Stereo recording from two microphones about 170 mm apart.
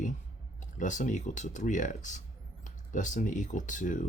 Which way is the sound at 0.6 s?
45° left (ahead or behind).